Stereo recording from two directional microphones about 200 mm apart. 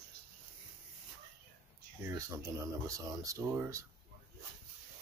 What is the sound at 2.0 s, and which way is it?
Speech, 15° right (ahead or behind).